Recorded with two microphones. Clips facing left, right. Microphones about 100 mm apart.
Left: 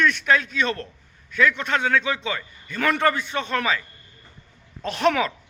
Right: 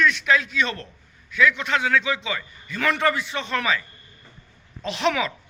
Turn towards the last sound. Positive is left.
turn(degrees=45)  # may be behind; listen again after turning